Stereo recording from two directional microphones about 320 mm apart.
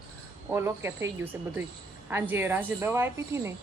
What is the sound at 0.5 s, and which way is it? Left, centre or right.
Speech, centre.